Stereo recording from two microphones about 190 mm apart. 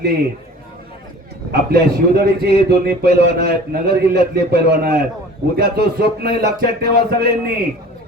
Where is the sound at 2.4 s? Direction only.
55° right (ahead or behind).